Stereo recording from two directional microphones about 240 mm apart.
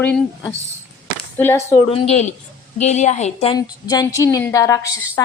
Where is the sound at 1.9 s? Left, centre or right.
Left.